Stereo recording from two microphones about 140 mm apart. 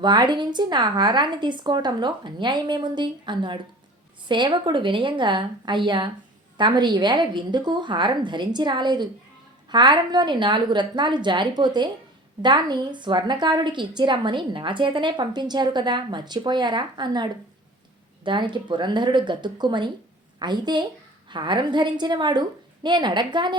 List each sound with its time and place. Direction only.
0.0 s a woman's voice: 30° right (ahead or behind)